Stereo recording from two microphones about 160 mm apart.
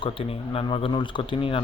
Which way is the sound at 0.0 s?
35° left (ahead or behind).